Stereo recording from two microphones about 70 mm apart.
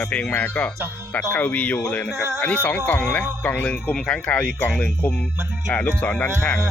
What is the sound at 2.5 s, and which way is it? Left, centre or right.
Speech, centre.